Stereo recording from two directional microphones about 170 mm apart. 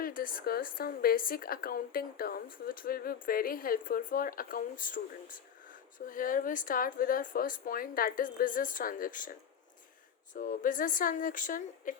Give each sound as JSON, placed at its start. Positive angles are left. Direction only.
{"t": 0.0, "sound": "speech", "side_deg": 55}
{"t": 10.3, "sound": "speech", "side_deg": 55}